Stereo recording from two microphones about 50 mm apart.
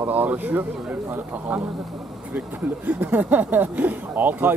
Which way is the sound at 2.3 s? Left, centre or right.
Right.